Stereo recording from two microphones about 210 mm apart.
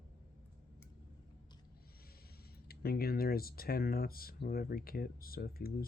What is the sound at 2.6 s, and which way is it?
Speech, 45° left (ahead or behind).